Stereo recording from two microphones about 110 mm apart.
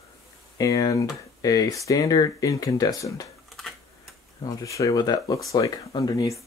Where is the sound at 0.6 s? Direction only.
35° left (ahead or behind).